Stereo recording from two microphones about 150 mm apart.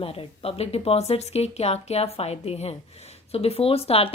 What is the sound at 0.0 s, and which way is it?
Speech, 40° left (ahead or behind).